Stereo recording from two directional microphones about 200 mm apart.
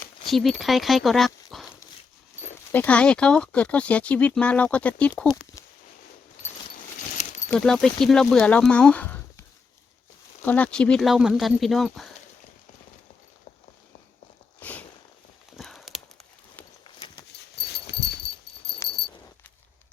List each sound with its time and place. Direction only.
0.3 s speech: centre (ahead or behind)
2.7 s speech: 5° left (ahead or behind)
6.7 s a sound: 40° left (ahead or behind)
7.5 s speech: centre (ahead or behind)
10.4 s speech: 10° left (ahead or behind)
14.6 s a sound: 10° left (ahead or behind)
16.8 s walk: 25° left (ahead or behind)
17.6 s dog: 55° left (ahead or behind)
18.9 s a sound: 55° left (ahead or behind)